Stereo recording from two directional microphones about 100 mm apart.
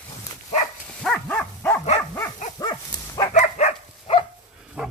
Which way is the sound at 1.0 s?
10° left (ahead or behind).